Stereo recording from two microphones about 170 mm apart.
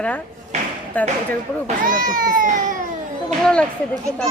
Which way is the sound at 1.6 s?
50° right (ahead or behind).